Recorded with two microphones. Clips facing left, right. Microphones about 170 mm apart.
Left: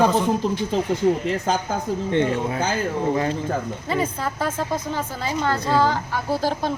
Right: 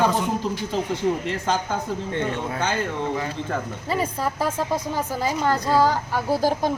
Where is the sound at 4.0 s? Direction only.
10° right (ahead or behind).